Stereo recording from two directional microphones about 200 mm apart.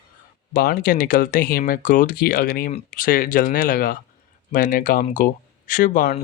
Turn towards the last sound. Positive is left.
turn(degrees=45)  # may be behind; listen again after turning